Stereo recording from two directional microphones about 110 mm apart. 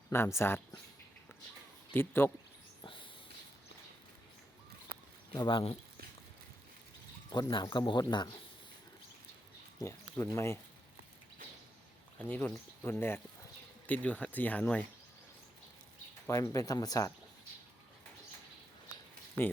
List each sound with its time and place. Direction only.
0.1 s speech: 25° left (ahead or behind)
1.9 s speech: 20° left (ahead or behind)
2.8 s a sound: 50° left (ahead or behind)
5.3 s speech: 50° left (ahead or behind)
7.3 s speech: 40° left (ahead or behind)
9.8 s speech: 25° left (ahead or behind)
12.2 s speech: 15° left (ahead or behind)
16.3 s speech: 30° left (ahead or behind)